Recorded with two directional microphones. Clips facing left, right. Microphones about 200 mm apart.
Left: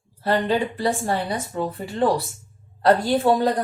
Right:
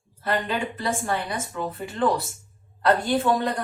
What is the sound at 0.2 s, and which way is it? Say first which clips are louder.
A woman's voice: left 5 dB; 35° left (ahead or behind).